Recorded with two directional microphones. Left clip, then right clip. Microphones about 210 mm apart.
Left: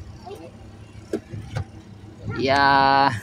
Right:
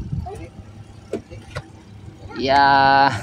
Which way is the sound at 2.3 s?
Centre (ahead or behind).